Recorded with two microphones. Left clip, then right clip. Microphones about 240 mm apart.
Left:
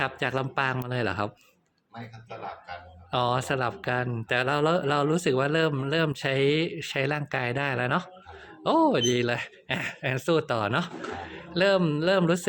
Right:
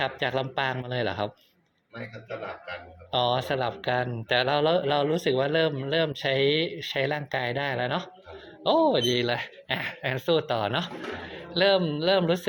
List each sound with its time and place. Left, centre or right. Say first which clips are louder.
0.0 s speech: right 1 dB; left
3.1 s speech: right 1 dB; left